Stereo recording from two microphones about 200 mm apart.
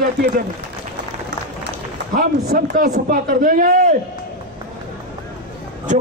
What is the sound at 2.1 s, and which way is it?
A man's voice, 50° right (ahead or behind).